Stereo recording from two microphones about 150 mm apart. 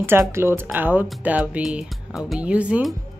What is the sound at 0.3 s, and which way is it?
Speech, 15° right (ahead or behind).